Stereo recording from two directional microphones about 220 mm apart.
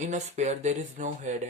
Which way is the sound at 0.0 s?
35° right (ahead or behind).